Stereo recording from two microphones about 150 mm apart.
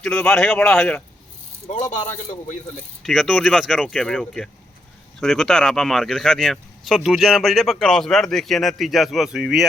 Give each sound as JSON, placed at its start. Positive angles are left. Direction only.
{"t": 0.0, "sound": "speech", "side_deg": 5}
{"t": 1.6, "sound": "speech", "side_deg": 55}
{"t": 3.0, "sound": "speech", "side_deg": 0}